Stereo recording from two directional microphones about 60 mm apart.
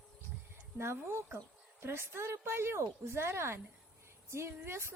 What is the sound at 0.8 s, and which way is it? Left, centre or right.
Child singing, right.